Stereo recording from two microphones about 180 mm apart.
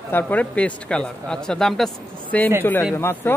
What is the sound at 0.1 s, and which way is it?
A man's voice, 10° left (ahead or behind).